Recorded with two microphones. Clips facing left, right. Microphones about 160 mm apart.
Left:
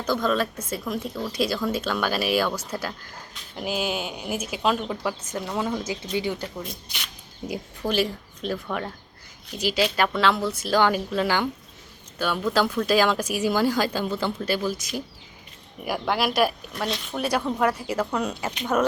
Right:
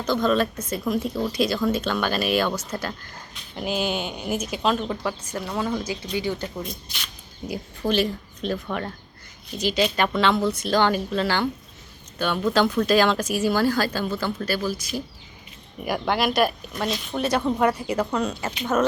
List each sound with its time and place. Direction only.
0.0 s speech: 5° left (ahead or behind); by 6.3 s 20° left (ahead or behind)
6.4 s speech: centre (ahead or behind)
7.8 s a woman's voice: 5° left (ahead or behind)
15.8 s speech: 5° left (ahead or behind)